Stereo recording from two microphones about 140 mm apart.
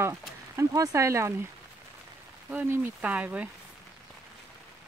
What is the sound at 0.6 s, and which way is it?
Speech, 20° right (ahead or behind).